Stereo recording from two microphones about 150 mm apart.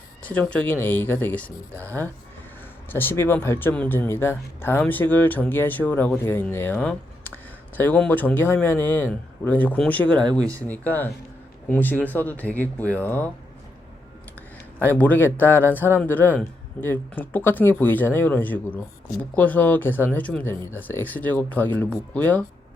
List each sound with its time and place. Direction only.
0.3 s speech: 10° left (ahead or behind)
1.7 s speech: 20° right (ahead or behind)
2.9 s speech: 15° left (ahead or behind)
14.9 s speech: 10° left (ahead or behind)